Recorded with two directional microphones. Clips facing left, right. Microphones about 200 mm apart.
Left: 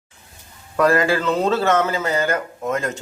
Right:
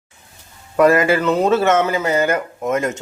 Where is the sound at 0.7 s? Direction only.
20° right (ahead or behind).